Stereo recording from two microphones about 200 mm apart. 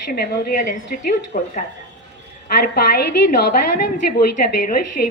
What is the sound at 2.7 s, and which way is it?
Speech, 50° left (ahead or behind).